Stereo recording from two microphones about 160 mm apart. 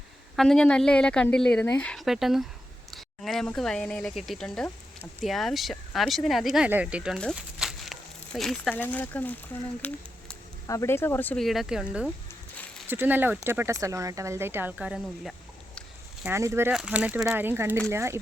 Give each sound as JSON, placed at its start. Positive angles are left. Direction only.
{"t": 0.3, "sound": "a woman's voice", "side_deg": 5}
{"t": 11.4, "sound": "a woman's voice", "side_deg": 0}
{"t": 16.2, "sound": "a woman's voice", "side_deg": -15}